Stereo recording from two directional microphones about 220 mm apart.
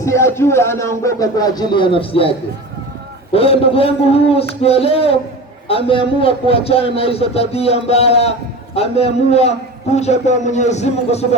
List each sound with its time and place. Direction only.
0.0 s speech: 10° left (ahead or behind)
3.3 s a man's voice: 25° left (ahead or behind)